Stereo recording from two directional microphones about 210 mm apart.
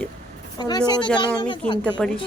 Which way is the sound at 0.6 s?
20° left (ahead or behind).